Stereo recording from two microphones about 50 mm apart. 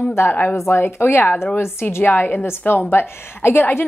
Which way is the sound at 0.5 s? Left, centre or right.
Left.